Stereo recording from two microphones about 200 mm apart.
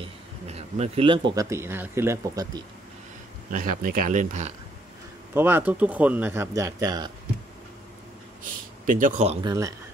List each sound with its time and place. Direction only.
0.0 s speech: 30° right (ahead or behind); by 2.6 s 15° right (ahead or behind)
3.5 s speech: 45° right (ahead or behind)
5.3 s speech: 10° right (ahead or behind)
8.8 s speech: 45° right (ahead or behind)